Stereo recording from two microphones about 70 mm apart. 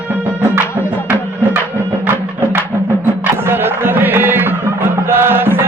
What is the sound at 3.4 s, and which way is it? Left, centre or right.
Music, right.